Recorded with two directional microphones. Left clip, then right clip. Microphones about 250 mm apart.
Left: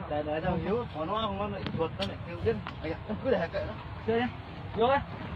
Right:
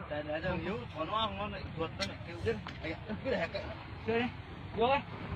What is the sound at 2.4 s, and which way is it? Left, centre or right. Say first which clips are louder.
Speech: left 5 dB; centre.